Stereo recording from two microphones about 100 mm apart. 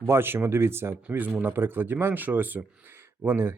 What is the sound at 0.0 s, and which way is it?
Speech, 25° right (ahead or behind).